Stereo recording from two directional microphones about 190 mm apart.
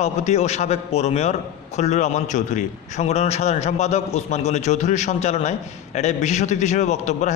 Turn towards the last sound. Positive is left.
turn(degrees=35)  # may be behind; listen again after turning